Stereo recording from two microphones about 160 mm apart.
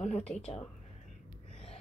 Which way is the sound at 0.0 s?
40° left (ahead or behind).